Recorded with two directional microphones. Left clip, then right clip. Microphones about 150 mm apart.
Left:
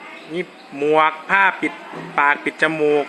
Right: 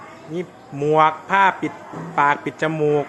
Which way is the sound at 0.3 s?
5° right (ahead or behind).